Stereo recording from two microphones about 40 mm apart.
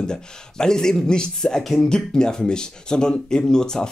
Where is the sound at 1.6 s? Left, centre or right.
Centre.